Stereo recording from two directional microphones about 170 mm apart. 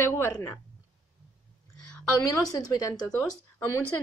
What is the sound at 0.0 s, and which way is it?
Speech, 15° left (ahead or behind).